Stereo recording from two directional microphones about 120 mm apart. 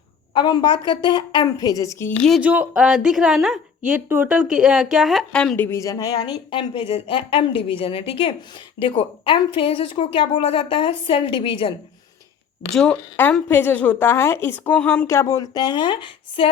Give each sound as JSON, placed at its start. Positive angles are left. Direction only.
{"t": 0.3, "sound": "a woman's voice", "side_deg": 40}
{"t": 2.4, "sound": "a woman's voice", "side_deg": -10}
{"t": 4.1, "sound": "speech", "side_deg": -15}
{"t": 4.4, "sound": "a woman's voice", "side_deg": -5}
{"t": 5.5, "sound": "speech", "side_deg": 25}
{"t": 12.7, "sound": "a woman's voice", "side_deg": 5}
{"t": 15.0, "sound": "a woman's voice", "side_deg": 25}